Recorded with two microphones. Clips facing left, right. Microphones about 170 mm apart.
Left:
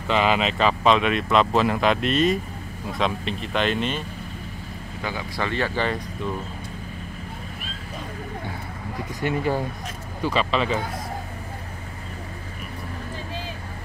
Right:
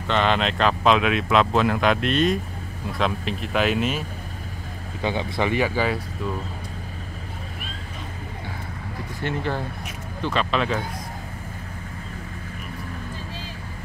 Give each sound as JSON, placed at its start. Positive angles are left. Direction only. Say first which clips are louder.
{"t": 0.1, "sound": "speech", "louder": "left 1 dB", "side_deg": 5}
{"t": 5.0, "sound": "speech", "louder": "right 5 dB", "side_deg": -25}
{"t": 9.2, "sound": "speech", "louder": "left 3 dB", "side_deg": 10}